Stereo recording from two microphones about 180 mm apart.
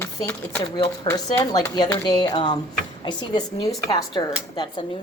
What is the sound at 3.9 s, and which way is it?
Speech, 25° left (ahead or behind).